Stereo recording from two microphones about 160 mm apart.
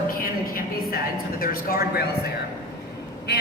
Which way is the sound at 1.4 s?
70° left (ahead or behind).